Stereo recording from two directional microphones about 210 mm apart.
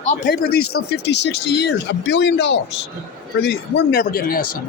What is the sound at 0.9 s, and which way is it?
Speech, 55° left (ahead or behind).